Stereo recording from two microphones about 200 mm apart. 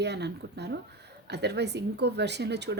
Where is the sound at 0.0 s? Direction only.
55° right (ahead or behind).